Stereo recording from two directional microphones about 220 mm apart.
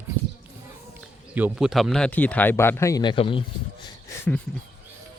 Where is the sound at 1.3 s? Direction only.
5° right (ahead or behind); by 3.4 s 25° left (ahead or behind).